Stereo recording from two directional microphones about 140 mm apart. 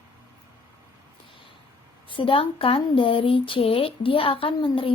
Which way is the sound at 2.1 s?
40° left (ahead or behind).